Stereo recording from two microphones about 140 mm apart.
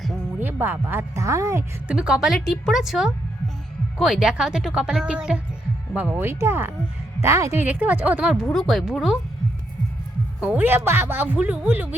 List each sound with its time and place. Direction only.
0.3 s speech: 15° right (ahead or behind)
1.9 s a woman's voice: 5° right (ahead or behind)
10.4 s speech: 10° right (ahead or behind)